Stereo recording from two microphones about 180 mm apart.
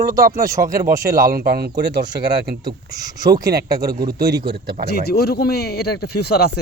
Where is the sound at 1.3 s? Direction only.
60° right (ahead or behind).